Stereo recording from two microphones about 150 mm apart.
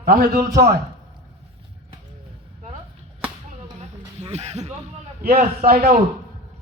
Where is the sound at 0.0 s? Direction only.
80° right.